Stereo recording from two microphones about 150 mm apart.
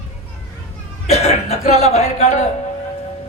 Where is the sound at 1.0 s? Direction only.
45° left (ahead or behind).